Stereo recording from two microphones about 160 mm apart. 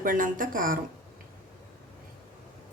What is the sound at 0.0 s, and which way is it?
Speech, 60° right (ahead or behind).